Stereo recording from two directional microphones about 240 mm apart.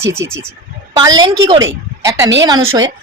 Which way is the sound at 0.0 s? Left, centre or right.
Centre.